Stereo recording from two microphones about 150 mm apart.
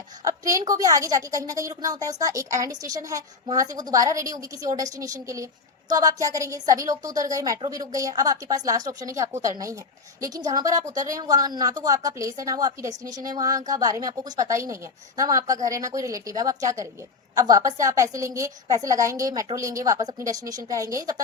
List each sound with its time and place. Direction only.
0.3 s a woman's voice: 25° right (ahead or behind)